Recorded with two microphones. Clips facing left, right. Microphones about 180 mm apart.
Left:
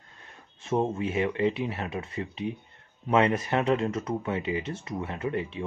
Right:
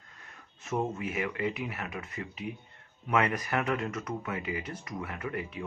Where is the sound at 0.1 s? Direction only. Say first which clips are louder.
Left 2 dB; 30° left (ahead or behind).